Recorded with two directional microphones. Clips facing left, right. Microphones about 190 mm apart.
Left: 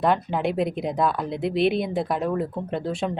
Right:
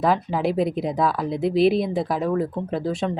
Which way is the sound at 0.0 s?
Centre (ahead or behind).